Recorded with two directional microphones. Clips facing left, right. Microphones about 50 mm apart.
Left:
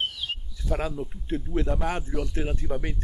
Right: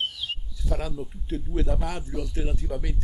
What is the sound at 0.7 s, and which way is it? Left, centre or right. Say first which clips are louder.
Speech: left 4 dB; left.